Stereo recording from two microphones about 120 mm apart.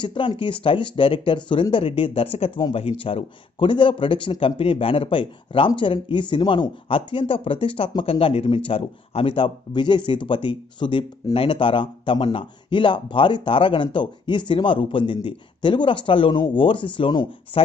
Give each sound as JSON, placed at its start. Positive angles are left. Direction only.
{"t": 0.0, "sound": "speech", "side_deg": 40}